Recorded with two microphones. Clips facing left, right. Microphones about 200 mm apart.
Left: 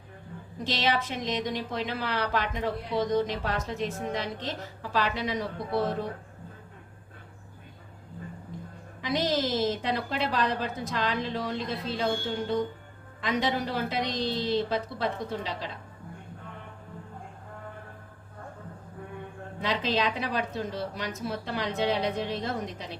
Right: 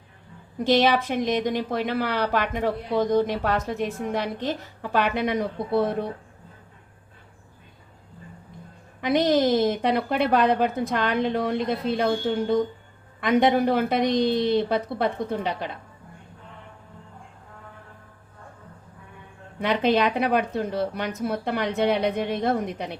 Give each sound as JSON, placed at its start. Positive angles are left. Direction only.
{"t": 0.6, "sound": "a woman's voice", "side_deg": -60}
{"t": 9.0, "sound": "a woman's voice", "side_deg": -60}
{"t": 19.6, "sound": "a woman's voice", "side_deg": -60}